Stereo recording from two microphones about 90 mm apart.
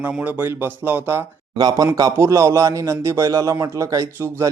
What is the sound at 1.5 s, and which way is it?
Speech, 50° right (ahead or behind).